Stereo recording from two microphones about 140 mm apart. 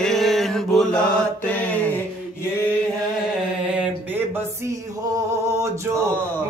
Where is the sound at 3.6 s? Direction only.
10° right (ahead or behind).